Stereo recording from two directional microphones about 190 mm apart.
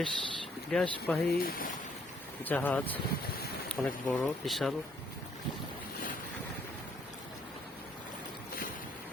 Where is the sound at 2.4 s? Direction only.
10° left (ahead or behind).